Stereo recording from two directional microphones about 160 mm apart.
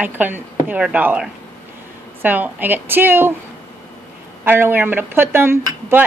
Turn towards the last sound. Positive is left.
turn(degrees=-15)  # may be behind; listen again after turning